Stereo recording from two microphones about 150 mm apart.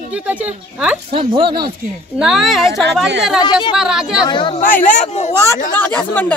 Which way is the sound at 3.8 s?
5° right (ahead or behind).